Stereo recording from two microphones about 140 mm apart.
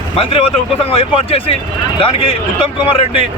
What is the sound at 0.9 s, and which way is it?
A man's voice, 40° left (ahead or behind).